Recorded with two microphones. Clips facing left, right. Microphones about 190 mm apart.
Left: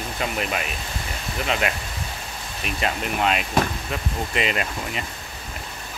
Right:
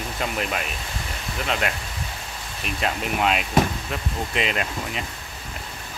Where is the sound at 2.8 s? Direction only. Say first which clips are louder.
Even; centre (ahead or behind).